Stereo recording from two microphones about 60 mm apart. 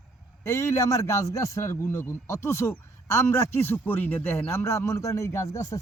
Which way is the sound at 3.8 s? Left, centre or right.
Left.